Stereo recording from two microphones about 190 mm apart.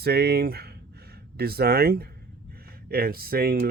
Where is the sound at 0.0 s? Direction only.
55° right (ahead or behind).